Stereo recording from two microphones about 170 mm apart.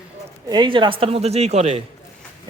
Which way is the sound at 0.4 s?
25° right (ahead or behind).